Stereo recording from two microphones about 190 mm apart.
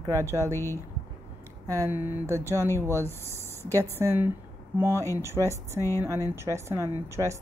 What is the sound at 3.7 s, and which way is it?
A woman's voice, 15° right (ahead or behind).